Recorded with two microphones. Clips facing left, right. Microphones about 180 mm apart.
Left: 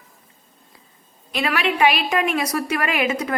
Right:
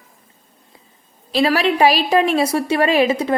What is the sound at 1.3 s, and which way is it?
Speech, 35° right (ahead or behind).